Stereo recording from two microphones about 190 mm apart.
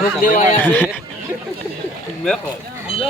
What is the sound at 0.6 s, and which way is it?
Speech, 10° left (ahead or behind).